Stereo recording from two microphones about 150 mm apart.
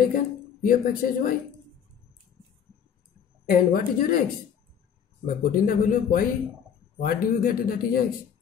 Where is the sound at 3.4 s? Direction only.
70° left (ahead or behind).